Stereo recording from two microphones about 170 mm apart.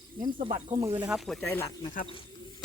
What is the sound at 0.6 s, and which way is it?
Speech, 20° right (ahead or behind).